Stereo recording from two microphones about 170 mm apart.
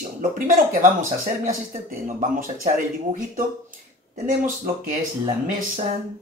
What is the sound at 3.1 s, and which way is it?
Speech, 50° right (ahead or behind).